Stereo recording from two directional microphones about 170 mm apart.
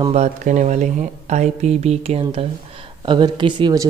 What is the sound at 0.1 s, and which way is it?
A woman's voice, 45° right (ahead or behind).